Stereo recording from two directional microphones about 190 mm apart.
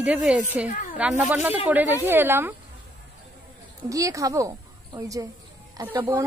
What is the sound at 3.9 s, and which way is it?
A child's voice, 15° right (ahead or behind).